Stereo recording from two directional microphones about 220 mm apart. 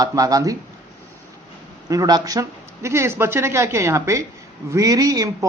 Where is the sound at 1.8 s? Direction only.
15° right (ahead or behind).